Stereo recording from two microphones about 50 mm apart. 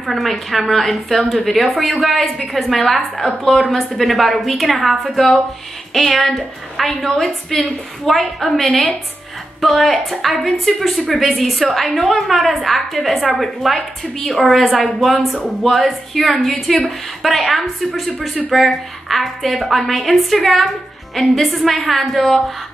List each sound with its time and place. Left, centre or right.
0.0 s a woman's voice: centre